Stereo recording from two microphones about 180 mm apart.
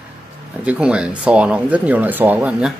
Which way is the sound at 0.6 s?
5° right (ahead or behind).